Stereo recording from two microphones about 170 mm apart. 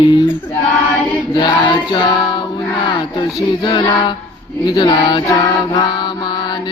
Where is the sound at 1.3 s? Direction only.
25° left (ahead or behind).